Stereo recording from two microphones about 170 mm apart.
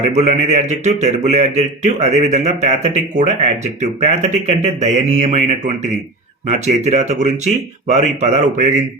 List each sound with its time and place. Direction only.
0.1 s speech: 40° right (ahead or behind)